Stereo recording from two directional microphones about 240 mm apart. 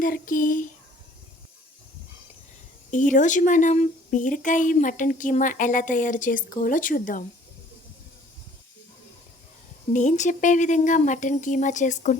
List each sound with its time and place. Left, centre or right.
0.0 s speech: left
2.9 s speech: left
9.9 s speech: left